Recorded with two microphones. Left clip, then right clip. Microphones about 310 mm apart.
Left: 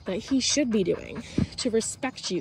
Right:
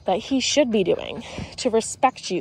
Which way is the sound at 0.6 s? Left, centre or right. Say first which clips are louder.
Right 5 dB; right.